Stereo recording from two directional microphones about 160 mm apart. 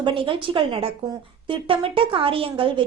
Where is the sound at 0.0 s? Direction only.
30° right (ahead or behind).